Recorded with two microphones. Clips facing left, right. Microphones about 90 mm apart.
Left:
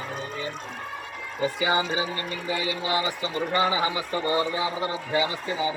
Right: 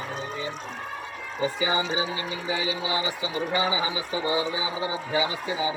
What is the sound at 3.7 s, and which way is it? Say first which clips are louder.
Speech: left 2 dB; 50° left (ahead or behind).